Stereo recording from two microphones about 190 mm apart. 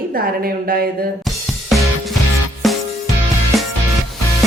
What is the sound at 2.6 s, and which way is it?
Music, centre (ahead or behind).